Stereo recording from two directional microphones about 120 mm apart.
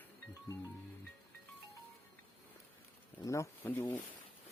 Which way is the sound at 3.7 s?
15° left (ahead or behind).